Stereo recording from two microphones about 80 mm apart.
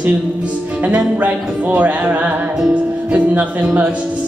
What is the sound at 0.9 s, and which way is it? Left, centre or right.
Music, centre.